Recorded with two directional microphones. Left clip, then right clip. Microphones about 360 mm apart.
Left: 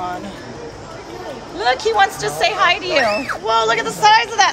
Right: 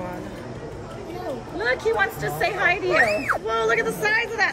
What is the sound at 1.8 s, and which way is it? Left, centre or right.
Speech, centre.